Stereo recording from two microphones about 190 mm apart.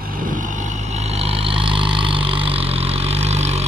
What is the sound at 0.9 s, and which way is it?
Vehicle, 35° right (ahead or behind).